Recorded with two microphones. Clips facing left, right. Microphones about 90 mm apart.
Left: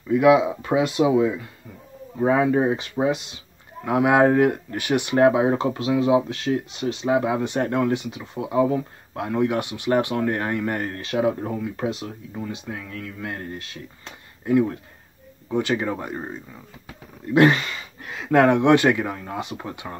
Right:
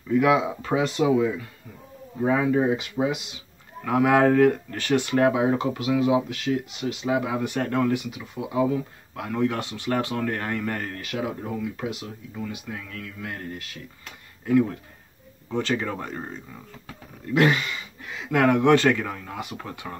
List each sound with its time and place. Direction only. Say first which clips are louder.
0.1 s speech: left 4 dB; 10° left (ahead or behind)
17.3 s speech: left 4 dB; 30° left (ahead or behind)